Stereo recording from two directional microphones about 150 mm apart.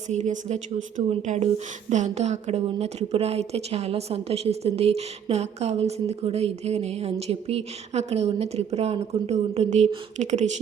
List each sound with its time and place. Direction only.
0.1 s a woman's voice: 50° right (ahead or behind)